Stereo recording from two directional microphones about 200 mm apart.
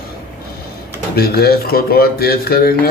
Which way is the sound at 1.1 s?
50° left (ahead or behind).